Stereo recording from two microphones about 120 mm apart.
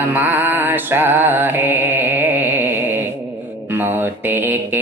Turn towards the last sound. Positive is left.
turn(degrees=-15)  # may be behind; listen again after turning